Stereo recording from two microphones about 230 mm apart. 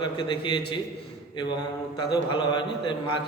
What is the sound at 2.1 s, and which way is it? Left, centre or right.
Speech, centre.